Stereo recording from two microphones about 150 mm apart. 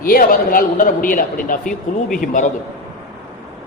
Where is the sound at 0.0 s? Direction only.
70° left (ahead or behind).